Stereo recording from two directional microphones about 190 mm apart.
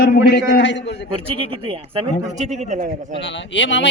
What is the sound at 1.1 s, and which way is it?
Speech, 25° right (ahead or behind).